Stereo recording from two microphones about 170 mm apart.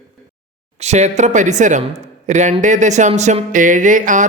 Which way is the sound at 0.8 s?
40° right (ahead or behind).